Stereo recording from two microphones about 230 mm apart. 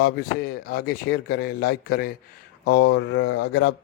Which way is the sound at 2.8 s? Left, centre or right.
Left.